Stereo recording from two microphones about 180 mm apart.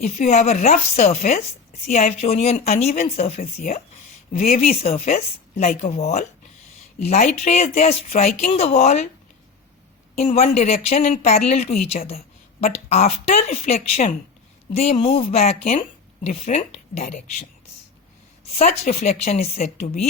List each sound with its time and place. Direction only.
0.0 s speech: 40° left (ahead or behind)
10.2 s speech: 35° left (ahead or behind)
18.5 s speech: 35° left (ahead or behind)